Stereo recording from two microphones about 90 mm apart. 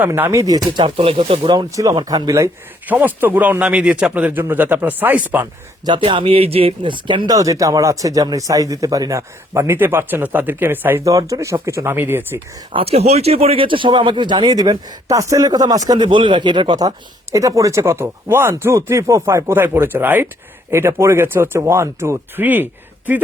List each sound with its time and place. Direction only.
0.0 s speech: 25° right (ahead or behind)
0.4 s speech: 45° right (ahead or behind)
0.8 s speech: 80° right
1.7 s speech: 35° right (ahead or behind)
2.0 s speech: 50° right (ahead or behind)
2.8 s speech: 20° right (ahead or behind)
5.8 s speech: 60° right (ahead or behind)
7.3 s speech: 40° right (ahead or behind); by 11.0 s 25° right (ahead or behind)
11.0 s speech: 40° right (ahead or behind); by 12.4 s 25° right (ahead or behind)
12.7 s speech: 90° right; by 14.9 s 50° right (ahead or behind)
15.0 s speech: 40° right (ahead or behind)
16.0 s speech: 65° right (ahead or behind)
17.3 s speech: 35° right (ahead or behind); by 23.2 s 20° right (ahead or behind)